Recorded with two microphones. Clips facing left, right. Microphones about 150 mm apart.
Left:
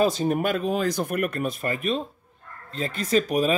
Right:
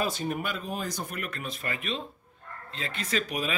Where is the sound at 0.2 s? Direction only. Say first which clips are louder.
Left 8 dB; 45° left (ahead or behind).